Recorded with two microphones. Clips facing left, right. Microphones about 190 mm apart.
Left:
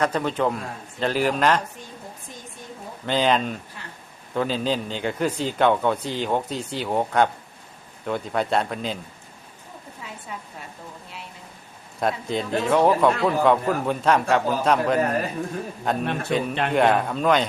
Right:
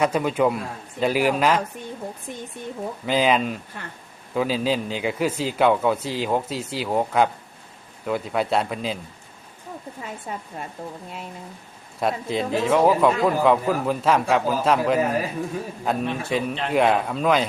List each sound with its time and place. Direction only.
0.0 s a man's voice: 10° right (ahead or behind)
3.1 s speech: 5° right (ahead or behind)
10.0 s speech: 45° right (ahead or behind)
11.9 s speech: centre (ahead or behind)